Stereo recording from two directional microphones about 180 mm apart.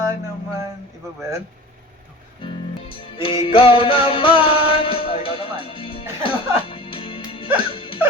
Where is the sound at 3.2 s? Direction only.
30° left (ahead or behind).